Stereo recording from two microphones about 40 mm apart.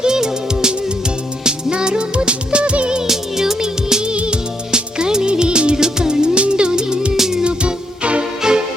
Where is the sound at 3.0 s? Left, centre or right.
Centre.